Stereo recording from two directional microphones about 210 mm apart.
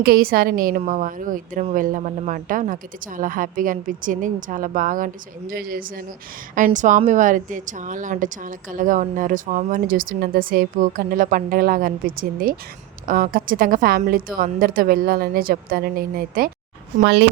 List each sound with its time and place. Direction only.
0.0 s a woman's voice: 45° right (ahead or behind)
17.0 s a woman's voice: 55° right (ahead or behind)